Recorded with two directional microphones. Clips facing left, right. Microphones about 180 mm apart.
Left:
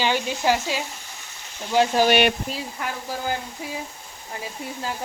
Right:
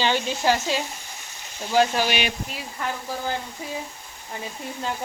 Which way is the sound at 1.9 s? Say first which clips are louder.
Left 6 dB; 55° left (ahead or behind).